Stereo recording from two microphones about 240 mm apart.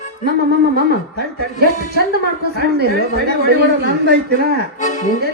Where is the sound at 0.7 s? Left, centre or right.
Right.